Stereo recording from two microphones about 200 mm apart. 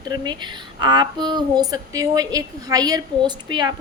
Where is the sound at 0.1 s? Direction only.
20° right (ahead or behind).